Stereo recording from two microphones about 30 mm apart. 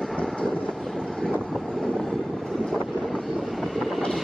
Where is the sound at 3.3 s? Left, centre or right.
Centre.